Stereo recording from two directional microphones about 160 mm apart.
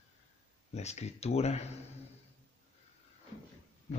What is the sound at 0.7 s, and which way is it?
Speech, 45° left (ahead or behind).